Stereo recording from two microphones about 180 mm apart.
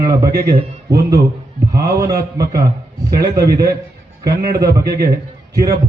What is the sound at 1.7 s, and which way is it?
A man's voice, 20° right (ahead or behind).